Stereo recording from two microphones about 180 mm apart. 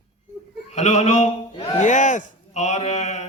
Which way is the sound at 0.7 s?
40° left (ahead or behind).